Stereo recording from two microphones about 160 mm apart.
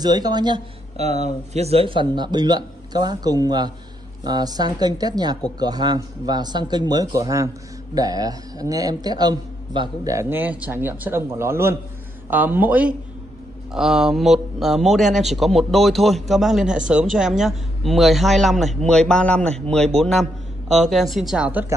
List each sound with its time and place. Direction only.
0.0 s speech: 25° right (ahead or behind)
0.9 s a man's voice: 45° right (ahead or behind); by 21.7 s 10° right (ahead or behind)